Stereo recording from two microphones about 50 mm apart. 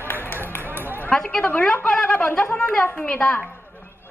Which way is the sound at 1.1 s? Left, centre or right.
Centre.